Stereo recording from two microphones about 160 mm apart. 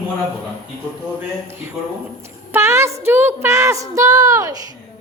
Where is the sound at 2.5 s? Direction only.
15° right (ahead or behind).